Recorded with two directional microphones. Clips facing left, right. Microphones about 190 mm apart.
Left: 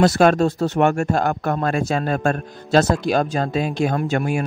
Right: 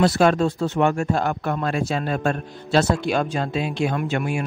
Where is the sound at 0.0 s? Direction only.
45° left (ahead or behind).